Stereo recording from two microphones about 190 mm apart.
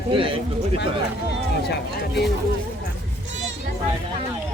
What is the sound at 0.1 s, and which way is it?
Speech, 25° right (ahead or behind).